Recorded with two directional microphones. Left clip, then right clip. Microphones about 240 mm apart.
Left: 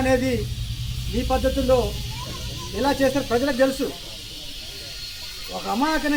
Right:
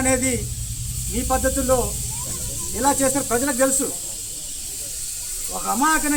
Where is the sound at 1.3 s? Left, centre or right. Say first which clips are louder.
Even; centre.